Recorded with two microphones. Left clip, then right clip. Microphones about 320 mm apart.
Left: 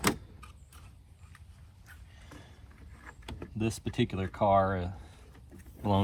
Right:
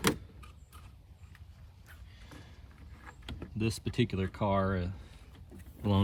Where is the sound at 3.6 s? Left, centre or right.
Centre.